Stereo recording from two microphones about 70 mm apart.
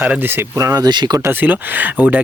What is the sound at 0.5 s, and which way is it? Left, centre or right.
Speech, right.